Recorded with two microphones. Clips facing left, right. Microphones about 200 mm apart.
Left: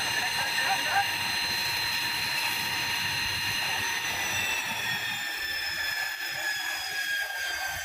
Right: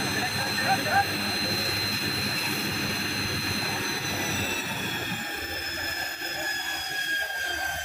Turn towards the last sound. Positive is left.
turn(degrees=-60)  # may be behind; listen again after turning